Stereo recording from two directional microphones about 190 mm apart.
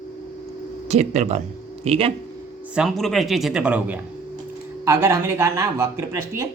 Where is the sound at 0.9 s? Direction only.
35° right (ahead or behind).